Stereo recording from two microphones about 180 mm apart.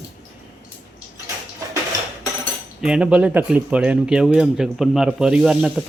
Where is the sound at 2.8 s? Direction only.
5° right (ahead or behind).